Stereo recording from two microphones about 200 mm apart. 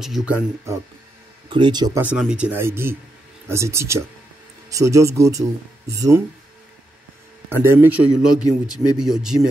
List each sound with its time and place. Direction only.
0.0 s a man's voice: centre (ahead or behind)
1.5 s speech: 20° right (ahead or behind)
2.0 s speech: 5° right (ahead or behind)
7.6 s a man's voice: 10° right (ahead or behind)